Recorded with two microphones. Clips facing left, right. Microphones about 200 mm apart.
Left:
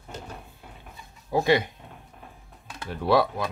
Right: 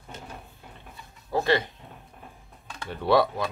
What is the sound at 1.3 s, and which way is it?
Speech, 15° left (ahead or behind).